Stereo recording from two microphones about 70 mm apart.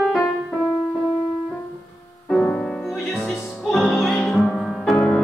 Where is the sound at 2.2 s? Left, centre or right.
Centre.